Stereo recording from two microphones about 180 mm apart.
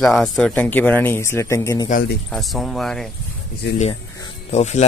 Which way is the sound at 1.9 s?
55° left (ahead or behind).